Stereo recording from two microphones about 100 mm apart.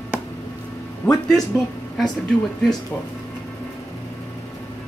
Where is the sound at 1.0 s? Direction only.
15° left (ahead or behind).